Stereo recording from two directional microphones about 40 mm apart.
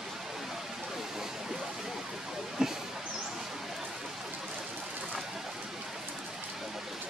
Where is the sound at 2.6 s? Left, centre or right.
Centre.